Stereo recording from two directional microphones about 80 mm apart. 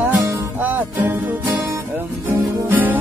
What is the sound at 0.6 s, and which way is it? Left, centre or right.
Music, right.